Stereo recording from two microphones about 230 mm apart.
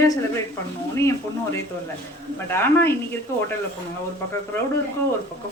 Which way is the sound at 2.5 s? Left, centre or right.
Centre.